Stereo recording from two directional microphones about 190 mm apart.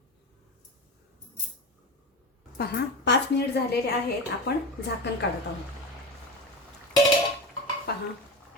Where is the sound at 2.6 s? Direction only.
65° left (ahead or behind).